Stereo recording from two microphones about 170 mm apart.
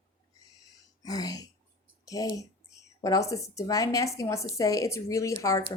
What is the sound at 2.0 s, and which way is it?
A woman's voice, 20° left (ahead or behind).